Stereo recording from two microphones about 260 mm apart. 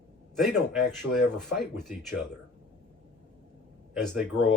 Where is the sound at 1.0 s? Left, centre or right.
Left.